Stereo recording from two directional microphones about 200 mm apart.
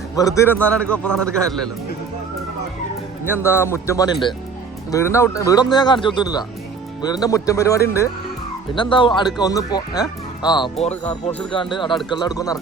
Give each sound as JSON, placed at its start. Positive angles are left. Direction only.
{"t": 0.2, "sound": "a man's voice", "side_deg": 15}
{"t": 3.2, "sound": "speech", "side_deg": 10}